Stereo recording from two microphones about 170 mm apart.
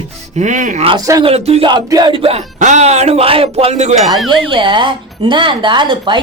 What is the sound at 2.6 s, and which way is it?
A man's voice, 45° right (ahead or behind).